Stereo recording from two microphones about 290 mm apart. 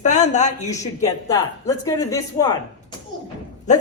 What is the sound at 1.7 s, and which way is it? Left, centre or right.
Speech, centre.